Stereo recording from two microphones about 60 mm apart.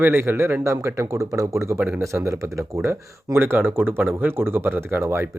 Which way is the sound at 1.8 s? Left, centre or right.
Right.